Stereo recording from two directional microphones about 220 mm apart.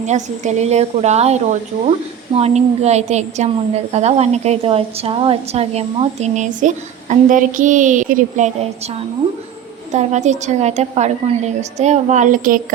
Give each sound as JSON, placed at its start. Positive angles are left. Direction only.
{"t": 0.0, "sound": "a woman's voice", "side_deg": -30}
{"t": 9.9, "sound": "a woman's voice", "side_deg": -30}